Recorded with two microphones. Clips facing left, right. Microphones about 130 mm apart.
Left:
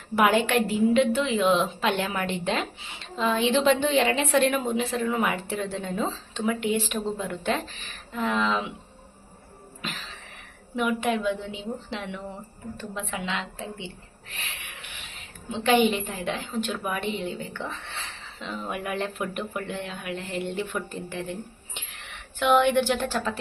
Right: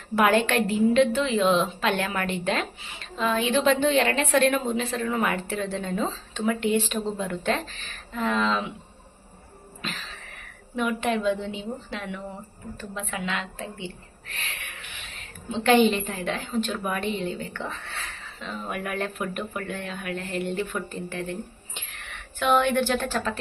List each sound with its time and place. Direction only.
0.3 s a woman's voice: 15° left (ahead or behind)
10.8 s a woman's voice: 10° left (ahead or behind)
18.7 s a woman's voice: 20° left (ahead or behind)
21.8 s whispering: 15° left (ahead or behind)
22.6 s a woman's voice: 15° left (ahead or behind)